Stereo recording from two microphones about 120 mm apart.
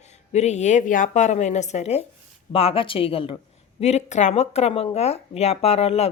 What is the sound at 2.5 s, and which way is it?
Speech, 50° left (ahead or behind).